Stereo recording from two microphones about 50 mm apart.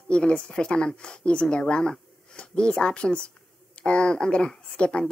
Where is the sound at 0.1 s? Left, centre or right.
Left.